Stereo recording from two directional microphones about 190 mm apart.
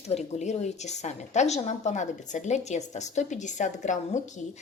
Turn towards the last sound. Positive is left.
turn(degrees=40)  # may be behind; listen again after turning